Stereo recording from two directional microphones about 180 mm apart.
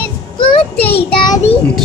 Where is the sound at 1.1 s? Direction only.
25° left (ahead or behind).